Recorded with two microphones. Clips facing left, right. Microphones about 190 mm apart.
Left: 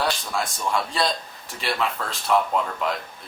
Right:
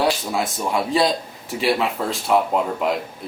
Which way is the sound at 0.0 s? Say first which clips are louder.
Right 5 dB; 5° right (ahead or behind).